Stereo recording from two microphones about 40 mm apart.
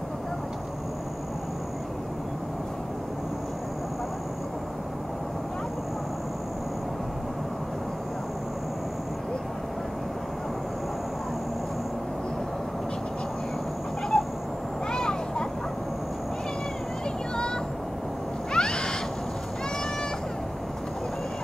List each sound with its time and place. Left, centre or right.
14.1 s cat: left
14.9 s a sound: centre
18.5 s cat: left